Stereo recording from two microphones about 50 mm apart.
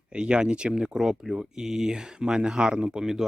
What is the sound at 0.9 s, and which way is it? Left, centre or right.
Speech, centre.